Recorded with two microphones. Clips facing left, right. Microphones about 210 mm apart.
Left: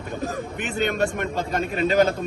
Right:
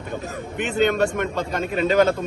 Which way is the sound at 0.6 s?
45° left (ahead or behind).